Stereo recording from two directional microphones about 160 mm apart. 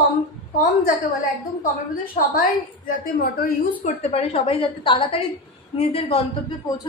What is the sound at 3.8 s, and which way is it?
A woman's voice, 40° left (ahead or behind).